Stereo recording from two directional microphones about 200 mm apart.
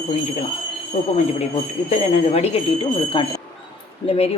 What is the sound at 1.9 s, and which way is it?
A woman's voice, 30° left (ahead or behind).